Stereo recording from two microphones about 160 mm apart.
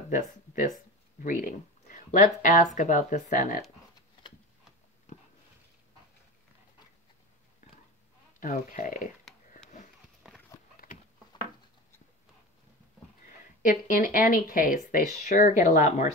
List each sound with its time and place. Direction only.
0.1 s speech: 55° left (ahead or behind)
8.4 s speech: 55° left (ahead or behind)
13.7 s speech: 55° left (ahead or behind)